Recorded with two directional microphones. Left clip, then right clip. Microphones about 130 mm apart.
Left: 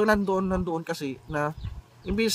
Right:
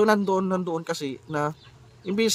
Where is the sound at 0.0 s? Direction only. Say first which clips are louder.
Right 2 dB; 35° right (ahead or behind).